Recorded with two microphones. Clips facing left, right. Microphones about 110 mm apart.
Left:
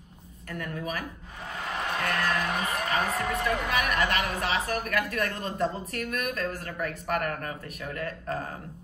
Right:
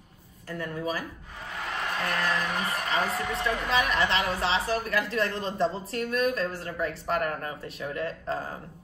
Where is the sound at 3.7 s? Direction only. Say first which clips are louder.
Right 4 dB; 30° right (ahead or behind).